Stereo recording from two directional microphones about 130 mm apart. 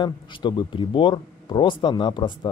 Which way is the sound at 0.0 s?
35° left (ahead or behind).